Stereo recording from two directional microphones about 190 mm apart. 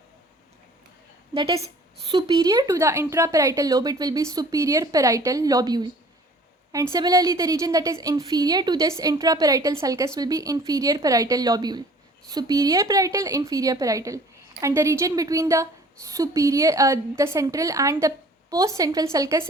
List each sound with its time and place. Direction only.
1.3 s a woman's voice: 30° right (ahead or behind)